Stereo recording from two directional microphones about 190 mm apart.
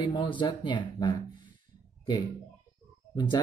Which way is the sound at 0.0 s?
25° left (ahead or behind).